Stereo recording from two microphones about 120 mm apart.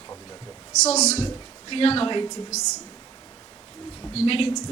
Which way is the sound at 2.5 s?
70° left (ahead or behind).